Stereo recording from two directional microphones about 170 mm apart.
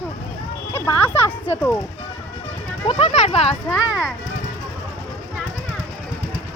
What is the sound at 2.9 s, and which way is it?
Speech, 35° left (ahead or behind).